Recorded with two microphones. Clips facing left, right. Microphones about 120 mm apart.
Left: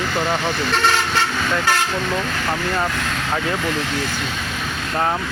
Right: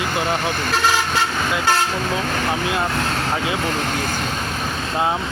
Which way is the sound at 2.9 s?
35° right (ahead or behind).